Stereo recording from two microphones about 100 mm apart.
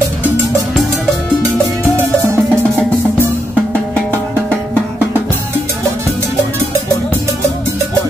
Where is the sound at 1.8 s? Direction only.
30° right (ahead or behind).